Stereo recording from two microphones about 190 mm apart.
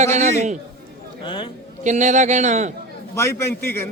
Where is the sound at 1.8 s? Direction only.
40° right (ahead or behind).